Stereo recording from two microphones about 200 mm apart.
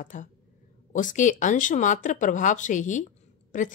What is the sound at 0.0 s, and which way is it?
Speech, 40° left (ahead or behind).